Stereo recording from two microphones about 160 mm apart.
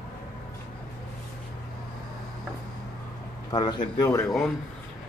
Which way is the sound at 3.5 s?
25° left (ahead or behind).